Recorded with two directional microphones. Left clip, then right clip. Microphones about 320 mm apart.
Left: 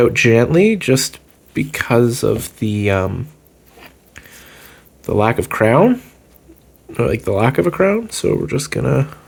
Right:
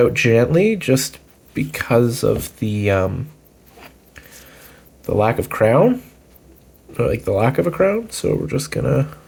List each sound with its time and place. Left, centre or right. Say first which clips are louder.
0.0 s speech: left 2 dB; left
4.1 s a sound: left 3 dB; left
6.9 s speech: left 1 dB; left